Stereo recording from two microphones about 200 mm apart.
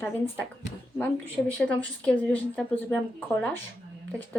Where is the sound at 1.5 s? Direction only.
5° left (ahead or behind).